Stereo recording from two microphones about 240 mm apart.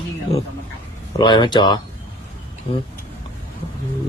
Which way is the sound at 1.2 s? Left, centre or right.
Centre.